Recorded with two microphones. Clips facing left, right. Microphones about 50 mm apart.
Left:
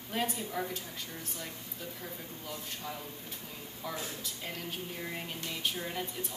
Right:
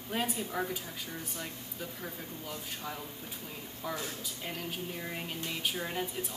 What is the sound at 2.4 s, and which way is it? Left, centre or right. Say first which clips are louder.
Speech: even; centre.